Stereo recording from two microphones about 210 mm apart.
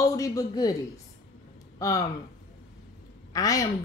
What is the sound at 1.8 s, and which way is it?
Speech, 15° left (ahead or behind).